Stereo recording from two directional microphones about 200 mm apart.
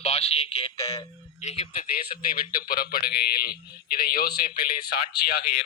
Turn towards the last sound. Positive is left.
turn(degrees=50)  # may be behind; listen again after turning